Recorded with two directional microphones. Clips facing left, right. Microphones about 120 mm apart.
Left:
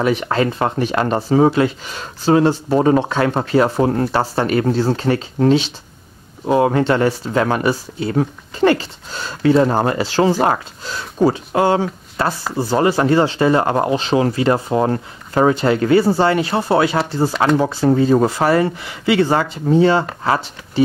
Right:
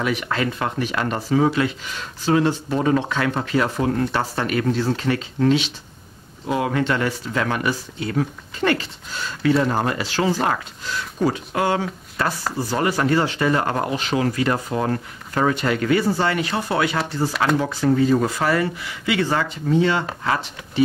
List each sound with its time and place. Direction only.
0.0 s speech: 35° left (ahead or behind)